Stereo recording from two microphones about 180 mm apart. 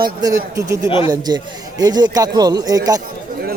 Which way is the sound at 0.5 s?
20° right (ahead or behind).